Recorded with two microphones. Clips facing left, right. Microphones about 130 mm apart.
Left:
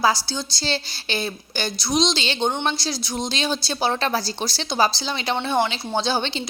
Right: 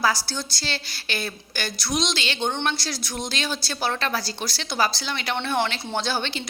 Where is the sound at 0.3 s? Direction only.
25° left (ahead or behind).